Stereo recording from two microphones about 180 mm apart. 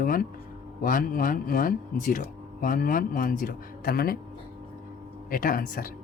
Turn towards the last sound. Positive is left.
turn(degrees=50)  # may be behind; listen again after turning